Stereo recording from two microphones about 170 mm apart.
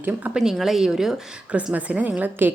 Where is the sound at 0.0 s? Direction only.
5° right (ahead or behind).